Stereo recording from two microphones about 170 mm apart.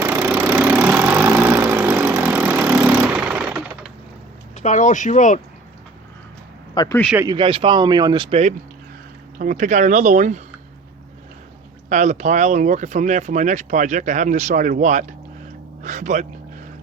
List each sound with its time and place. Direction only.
0.0 s engine: 15° right (ahead or behind)
4.5 s speech: 45° left (ahead or behind)
6.7 s speech: 20° left (ahead or behind)
7.3 s speech: 30° right (ahead or behind)
9.4 s speech: 50° right (ahead or behind)
11.9 s speech: 45° right (ahead or behind)